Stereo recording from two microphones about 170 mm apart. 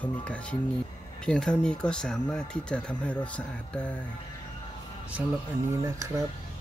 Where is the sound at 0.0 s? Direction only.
5° left (ahead or behind).